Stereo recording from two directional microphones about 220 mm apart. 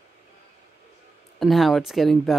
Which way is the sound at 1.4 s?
Centre (ahead or behind).